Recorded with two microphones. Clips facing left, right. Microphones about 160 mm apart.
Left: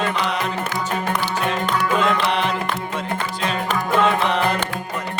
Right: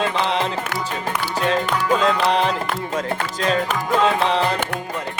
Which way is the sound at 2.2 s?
35° right (ahead or behind).